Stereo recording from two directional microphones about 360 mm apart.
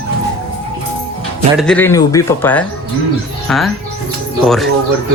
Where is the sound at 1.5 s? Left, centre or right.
Centre.